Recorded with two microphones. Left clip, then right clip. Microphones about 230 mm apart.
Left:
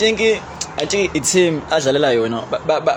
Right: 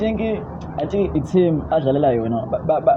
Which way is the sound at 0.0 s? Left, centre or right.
Left.